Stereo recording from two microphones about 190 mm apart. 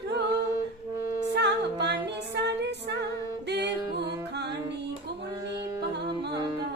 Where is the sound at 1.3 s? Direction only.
60° right (ahead or behind).